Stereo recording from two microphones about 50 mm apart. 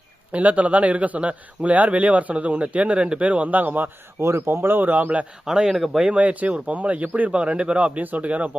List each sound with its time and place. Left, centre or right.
0.3 s a man's voice: right
4.2 s speech: right
4.8 s a man's voice: right
5.5 s speech: centre
6.0 s a man's voice: right